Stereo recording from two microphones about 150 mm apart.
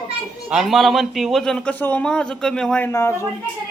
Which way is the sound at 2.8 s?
20° left (ahead or behind).